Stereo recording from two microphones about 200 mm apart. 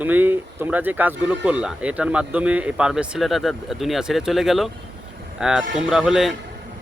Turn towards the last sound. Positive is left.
turn(degrees=0)  # may be behind; listen again after turning